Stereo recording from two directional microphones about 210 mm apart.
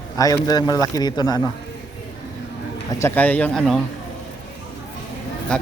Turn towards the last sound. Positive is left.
turn(degrees=5)  # may be behind; listen again after turning